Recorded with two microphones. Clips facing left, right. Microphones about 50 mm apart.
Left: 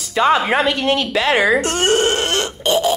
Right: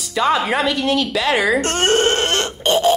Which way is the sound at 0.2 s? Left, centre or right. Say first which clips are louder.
Left 2 dB; left.